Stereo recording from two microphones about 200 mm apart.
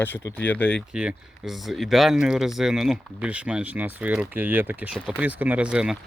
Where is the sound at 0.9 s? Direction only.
5° right (ahead or behind).